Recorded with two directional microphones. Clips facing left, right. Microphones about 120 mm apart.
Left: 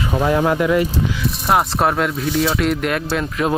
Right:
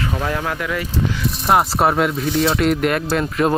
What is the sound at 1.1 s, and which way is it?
Speech, centre (ahead or behind).